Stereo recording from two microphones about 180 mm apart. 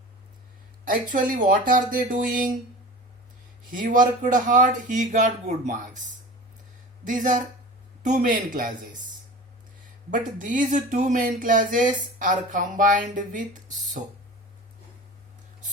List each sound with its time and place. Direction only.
1.1 s speech: 50° right (ahead or behind)
3.7 s speech: 50° right (ahead or behind)
7.0 s speech: 45° right (ahead or behind)
10.1 s speech: 45° right (ahead or behind)